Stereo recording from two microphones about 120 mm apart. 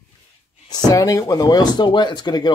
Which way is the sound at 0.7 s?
35° left (ahead or behind).